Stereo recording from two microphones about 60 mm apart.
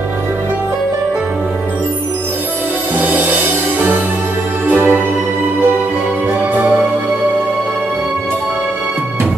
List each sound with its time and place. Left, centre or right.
3.0 s music: right
4.6 s music: right